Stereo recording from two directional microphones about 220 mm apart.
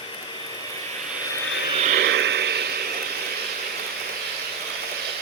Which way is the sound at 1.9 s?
50° right (ahead or behind).